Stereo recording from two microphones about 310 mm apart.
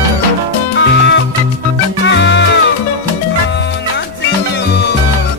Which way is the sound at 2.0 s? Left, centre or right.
Left.